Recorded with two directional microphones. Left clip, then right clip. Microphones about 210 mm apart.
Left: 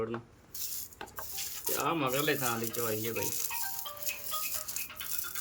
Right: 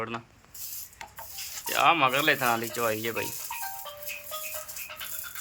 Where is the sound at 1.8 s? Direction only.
15° right (ahead or behind).